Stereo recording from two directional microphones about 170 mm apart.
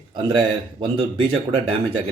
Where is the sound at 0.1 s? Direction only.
25° right (ahead or behind).